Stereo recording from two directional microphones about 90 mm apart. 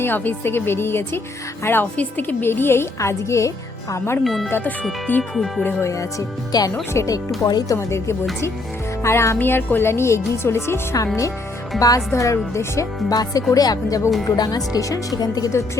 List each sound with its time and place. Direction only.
0.0 s a woman's voice: 25° left (ahead or behind)
4.2 s speech: centre (ahead or behind)
4.4 s a woman's voice: 20° left (ahead or behind)
5.3 s speech: centre (ahead or behind)
5.6 s a woman's voice: 35° left (ahead or behind)
11.8 s speech: 40° left (ahead or behind)